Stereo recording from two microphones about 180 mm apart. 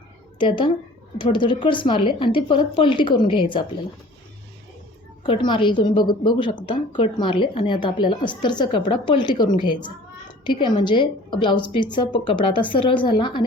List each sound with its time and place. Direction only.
0.3 s a woman's voice: 25° left (ahead or behind)
5.2 s a woman's voice: 25° left (ahead or behind)